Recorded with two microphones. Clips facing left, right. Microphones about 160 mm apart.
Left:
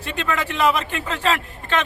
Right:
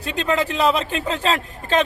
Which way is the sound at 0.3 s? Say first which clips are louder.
Right 2 dB; 35° right (ahead or behind).